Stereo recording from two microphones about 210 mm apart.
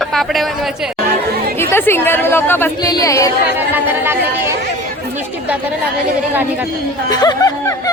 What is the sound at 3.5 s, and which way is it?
Speech, 10° right (ahead or behind).